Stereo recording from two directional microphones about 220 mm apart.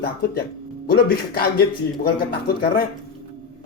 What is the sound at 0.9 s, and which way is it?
Speech, 45° left (ahead or behind).